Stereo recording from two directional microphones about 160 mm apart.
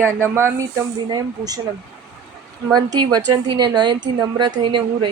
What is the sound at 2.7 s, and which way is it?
A woman's voice, 25° right (ahead or behind).